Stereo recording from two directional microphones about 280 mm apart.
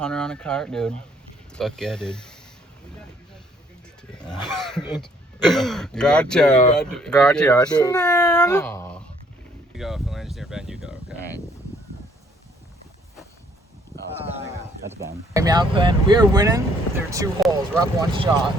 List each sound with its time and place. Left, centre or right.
0.0 s speech: centre
4.2 s speech: centre
14.4 s a sound: centre
15.3 s speech: centre